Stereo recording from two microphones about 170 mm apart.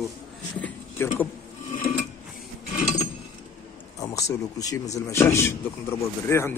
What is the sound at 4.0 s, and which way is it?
A man's voice, 20° left (ahead or behind).